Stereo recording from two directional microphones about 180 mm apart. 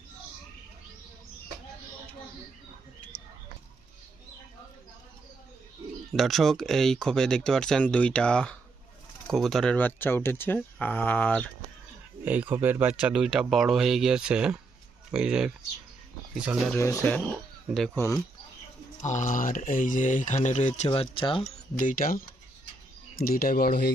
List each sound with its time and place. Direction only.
6.1 s speech: centre (ahead or behind)
12.2 s speech: 10° right (ahead or behind)
16.7 s speech: 15° left (ahead or behind)
19.0 s speech: 45° left (ahead or behind)
21.8 s speech: 50° left (ahead or behind)